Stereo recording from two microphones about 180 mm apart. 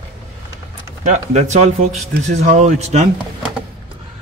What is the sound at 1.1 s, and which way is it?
Speech, 40° right (ahead or behind).